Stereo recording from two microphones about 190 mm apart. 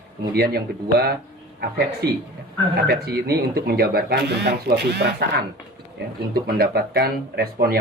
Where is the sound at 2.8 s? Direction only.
55° right (ahead or behind).